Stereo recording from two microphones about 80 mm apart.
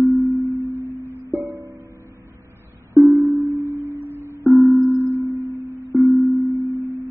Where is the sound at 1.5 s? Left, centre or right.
Right.